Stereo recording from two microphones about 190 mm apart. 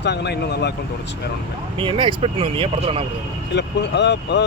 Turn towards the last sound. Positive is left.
turn(degrees=65)  # may be behind; listen again after turning